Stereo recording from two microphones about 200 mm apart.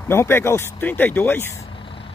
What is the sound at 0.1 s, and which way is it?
Speech, 10° left (ahead or behind).